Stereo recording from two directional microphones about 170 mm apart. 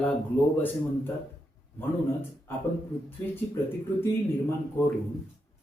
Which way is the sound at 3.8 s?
15° left (ahead or behind).